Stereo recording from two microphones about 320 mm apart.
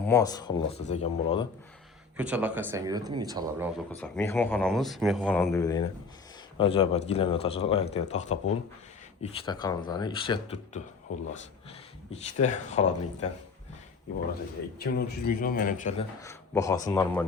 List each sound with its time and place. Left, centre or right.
0.1 s speech: centre
2.1 s speech: centre
4.0 s speech: centre
12.1 s a man's voice: left
14.8 s a man's voice: left
16.2 s speech: centre